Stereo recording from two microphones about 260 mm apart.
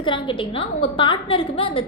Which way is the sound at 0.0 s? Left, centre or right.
Centre.